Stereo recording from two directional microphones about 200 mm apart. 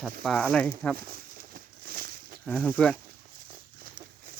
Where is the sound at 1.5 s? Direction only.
45° right (ahead or behind).